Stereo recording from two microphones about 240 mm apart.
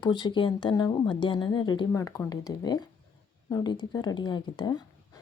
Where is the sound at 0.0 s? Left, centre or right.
Centre.